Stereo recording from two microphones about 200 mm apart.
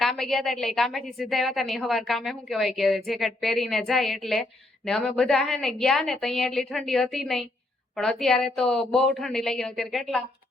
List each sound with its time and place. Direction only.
0.0 s a woman's voice: centre (ahead or behind)